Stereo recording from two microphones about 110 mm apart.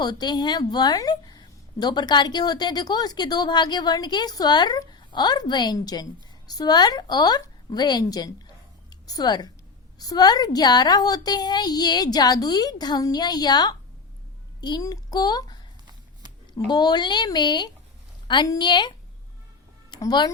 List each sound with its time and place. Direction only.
0.0 s a woman's voice: 40° left (ahead or behind)
16.6 s a woman's voice: 40° left (ahead or behind)